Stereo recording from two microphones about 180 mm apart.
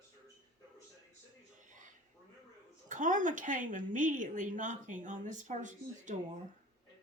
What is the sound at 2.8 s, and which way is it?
A woman's voice, 45° right (ahead or behind).